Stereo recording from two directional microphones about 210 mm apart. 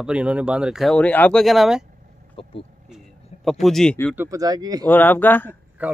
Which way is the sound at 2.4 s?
25° left (ahead or behind).